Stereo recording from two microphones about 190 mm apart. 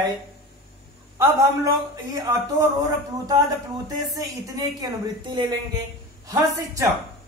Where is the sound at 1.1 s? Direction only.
15° right (ahead or behind).